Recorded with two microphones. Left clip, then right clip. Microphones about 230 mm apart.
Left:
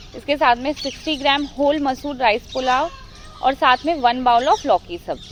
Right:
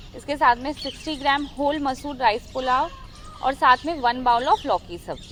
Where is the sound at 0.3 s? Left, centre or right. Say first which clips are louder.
Left 3 dB; right.